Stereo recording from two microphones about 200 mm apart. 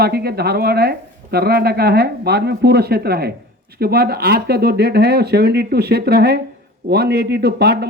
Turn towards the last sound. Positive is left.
turn(degrees=-55)  # may be behind; listen again after turning